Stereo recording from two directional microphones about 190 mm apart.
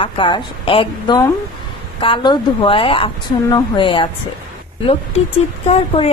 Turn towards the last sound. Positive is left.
turn(degrees=35)  # may be behind; listen again after turning